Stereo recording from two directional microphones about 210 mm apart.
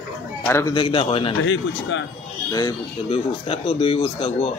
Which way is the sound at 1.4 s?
65° left (ahead or behind).